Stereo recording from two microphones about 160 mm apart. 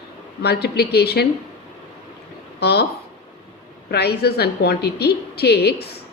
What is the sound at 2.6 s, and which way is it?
Speech, 90° left.